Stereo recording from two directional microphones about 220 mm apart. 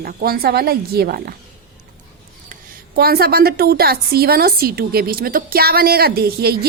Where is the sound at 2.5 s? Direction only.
45° right (ahead or behind).